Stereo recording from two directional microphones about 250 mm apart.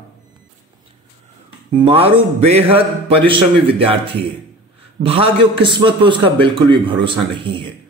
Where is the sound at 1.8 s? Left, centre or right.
Right.